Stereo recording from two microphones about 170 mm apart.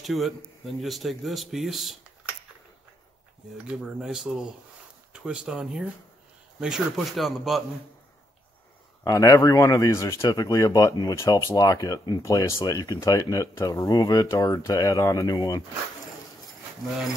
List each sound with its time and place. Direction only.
0.0 s a man's voice: centre (ahead or behind)
3.6 s speech: 5° right (ahead or behind)
9.0 s speech: 20° left (ahead or behind)